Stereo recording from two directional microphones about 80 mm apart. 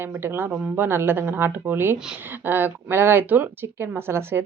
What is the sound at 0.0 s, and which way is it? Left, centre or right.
Speech, right.